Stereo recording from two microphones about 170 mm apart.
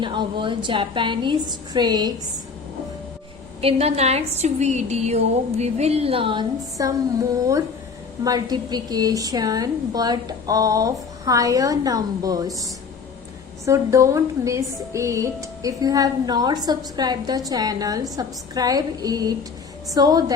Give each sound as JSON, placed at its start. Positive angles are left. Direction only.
{"t": 0.0, "sound": "a woman's voice", "side_deg": -30}
{"t": 3.6, "sound": "a woman's voice", "side_deg": -35}
{"t": 6.8, "sound": "a woman's voice", "side_deg": -20}
{"t": 8.2, "sound": "a woman's voice", "side_deg": -20}
{"t": 13.7, "sound": "a woman's voice", "side_deg": -20}